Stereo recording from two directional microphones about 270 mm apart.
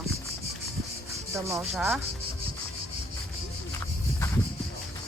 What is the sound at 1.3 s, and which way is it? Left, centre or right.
Speech, centre.